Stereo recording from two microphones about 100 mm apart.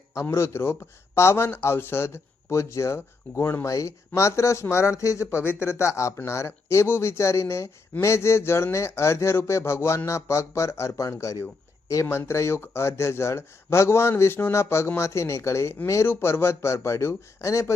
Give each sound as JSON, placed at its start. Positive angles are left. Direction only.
{"t": 0.1, "sound": "speech", "side_deg": 30}